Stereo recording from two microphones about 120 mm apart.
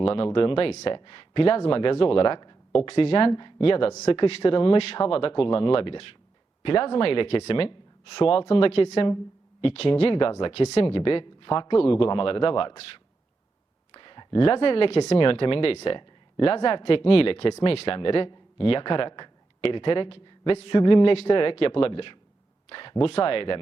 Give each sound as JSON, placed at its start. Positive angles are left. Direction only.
{"t": 0.0, "sound": "speech", "side_deg": 50}